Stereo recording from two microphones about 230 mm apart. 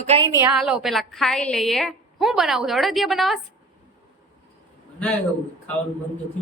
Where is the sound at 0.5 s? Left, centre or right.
Centre.